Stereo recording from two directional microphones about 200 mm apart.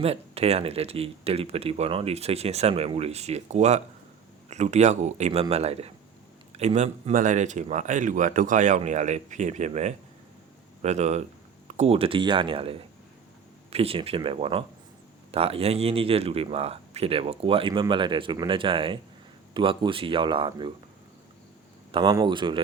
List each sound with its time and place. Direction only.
0.0 s speech: 30° right (ahead or behind)
21.9 s speech: 20° right (ahead or behind)